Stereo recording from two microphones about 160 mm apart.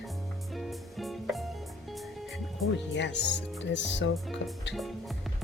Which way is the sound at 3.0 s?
90° left.